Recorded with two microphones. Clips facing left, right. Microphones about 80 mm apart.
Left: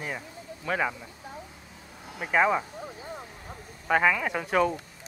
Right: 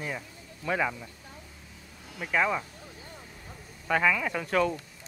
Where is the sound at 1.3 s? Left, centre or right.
Left; by 4.8 s centre.